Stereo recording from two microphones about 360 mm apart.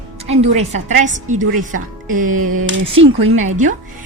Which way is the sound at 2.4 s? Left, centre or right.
Right.